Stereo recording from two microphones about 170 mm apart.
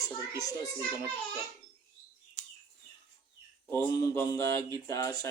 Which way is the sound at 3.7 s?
15° left (ahead or behind).